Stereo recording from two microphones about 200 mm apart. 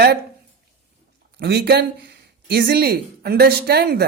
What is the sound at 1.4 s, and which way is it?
Speech, 60° right (ahead or behind).